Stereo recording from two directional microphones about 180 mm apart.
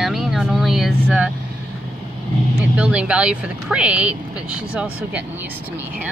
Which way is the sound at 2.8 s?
5° right (ahead or behind).